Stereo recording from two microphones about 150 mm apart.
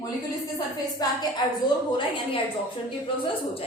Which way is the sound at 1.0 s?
25° left (ahead or behind).